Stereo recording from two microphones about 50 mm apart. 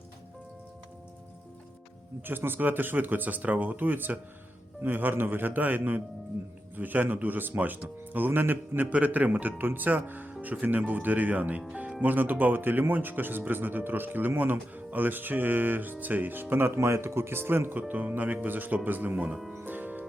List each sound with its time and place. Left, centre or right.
2.2 s speech: right
8.9 s speech: right
17.7 s speech: right
19.6 s music: right